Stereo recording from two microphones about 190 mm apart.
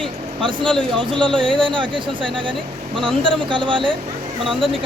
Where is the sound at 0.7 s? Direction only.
5° left (ahead or behind).